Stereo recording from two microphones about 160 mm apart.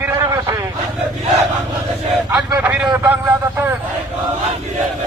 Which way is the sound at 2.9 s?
15° right (ahead or behind).